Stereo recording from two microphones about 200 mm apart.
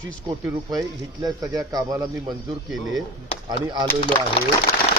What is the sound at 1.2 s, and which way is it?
Speech, 20° right (ahead or behind).